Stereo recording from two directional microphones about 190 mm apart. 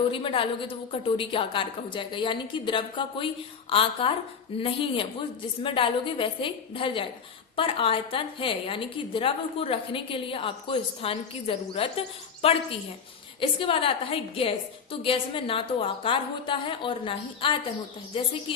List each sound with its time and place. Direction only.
0.1 s a woman's voice: 25° left (ahead or behind)